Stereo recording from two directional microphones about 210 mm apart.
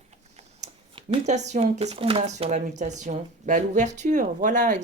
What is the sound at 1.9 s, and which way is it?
Speech, 25° right (ahead or behind).